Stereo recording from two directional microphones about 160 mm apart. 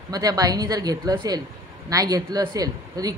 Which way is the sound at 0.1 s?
25° right (ahead or behind).